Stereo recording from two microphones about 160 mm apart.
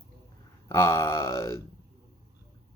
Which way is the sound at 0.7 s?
15° left (ahead or behind).